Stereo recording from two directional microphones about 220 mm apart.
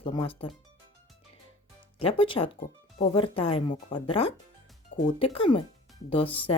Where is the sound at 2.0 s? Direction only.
25° left (ahead or behind).